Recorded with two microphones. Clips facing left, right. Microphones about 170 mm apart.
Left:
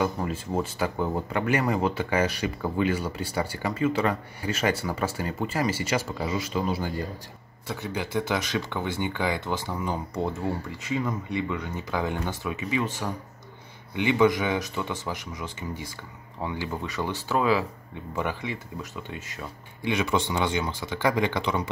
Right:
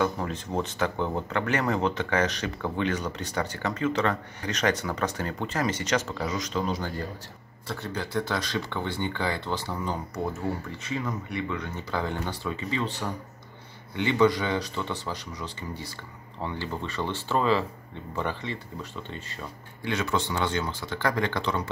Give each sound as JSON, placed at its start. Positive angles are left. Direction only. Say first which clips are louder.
{"t": 0.0, "sound": "speech", "louder": "even", "side_deg": 5}
{"t": 13.9, "sound": "speech", "louder": "left 1 dB", "side_deg": 15}